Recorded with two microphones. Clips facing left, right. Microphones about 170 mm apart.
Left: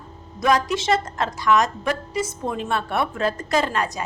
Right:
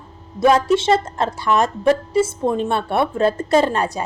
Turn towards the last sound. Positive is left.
turn(degrees=-30)  # may be behind; listen again after turning